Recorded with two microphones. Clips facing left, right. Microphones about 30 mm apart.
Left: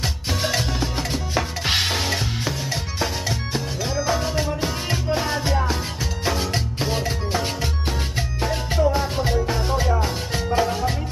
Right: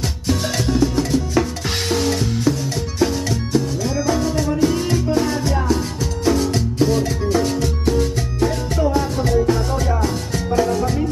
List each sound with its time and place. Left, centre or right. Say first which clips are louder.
0.3 s music: right 5 dB; centre